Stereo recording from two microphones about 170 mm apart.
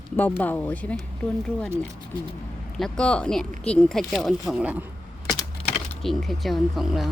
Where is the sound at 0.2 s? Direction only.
10° left (ahead or behind).